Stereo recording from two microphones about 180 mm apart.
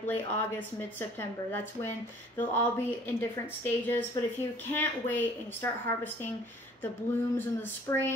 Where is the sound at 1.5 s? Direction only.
10° left (ahead or behind).